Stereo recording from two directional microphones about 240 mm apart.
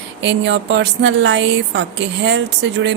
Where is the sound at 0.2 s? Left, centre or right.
Right.